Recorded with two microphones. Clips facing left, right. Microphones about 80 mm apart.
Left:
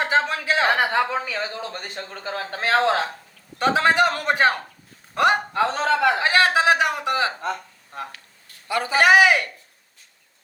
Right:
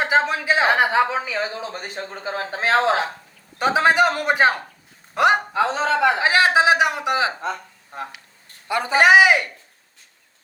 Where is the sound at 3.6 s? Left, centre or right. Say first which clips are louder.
Right 1 dB; centre.